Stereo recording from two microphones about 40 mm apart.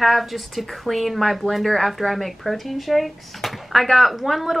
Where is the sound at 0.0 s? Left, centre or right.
Centre.